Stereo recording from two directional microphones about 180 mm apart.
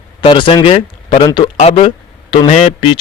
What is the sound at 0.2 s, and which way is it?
A man's voice, 25° left (ahead or behind).